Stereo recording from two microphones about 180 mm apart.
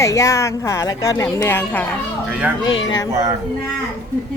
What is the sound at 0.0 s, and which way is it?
A woman's voice, 15° left (ahead or behind).